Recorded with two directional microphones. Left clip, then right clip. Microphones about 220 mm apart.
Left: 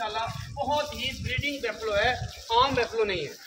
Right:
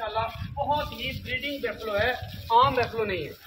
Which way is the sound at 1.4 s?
25° left (ahead or behind).